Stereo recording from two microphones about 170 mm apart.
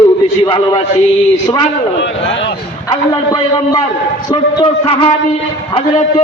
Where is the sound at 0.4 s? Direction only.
25° left (ahead or behind).